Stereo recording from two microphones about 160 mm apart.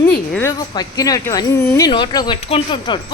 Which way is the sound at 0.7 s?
25° left (ahead or behind).